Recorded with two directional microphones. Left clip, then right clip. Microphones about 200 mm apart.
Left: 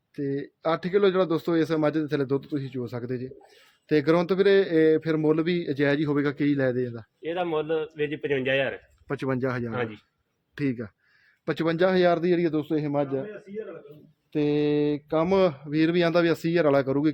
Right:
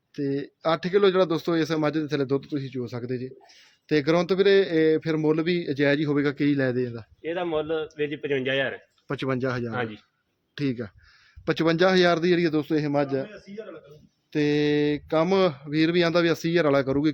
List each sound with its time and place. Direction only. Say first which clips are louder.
0.2 s a man's voice: right 1 dB; 10° right (ahead or behind)
9.0 s a man's voice: right 1 dB; 5° right (ahead or behind)
9.7 s a man's voice: even; 5° left (ahead or behind)
10.5 s speech: even; 10° right (ahead or behind)
14.3 s speech: right 1 dB; 15° right (ahead or behind)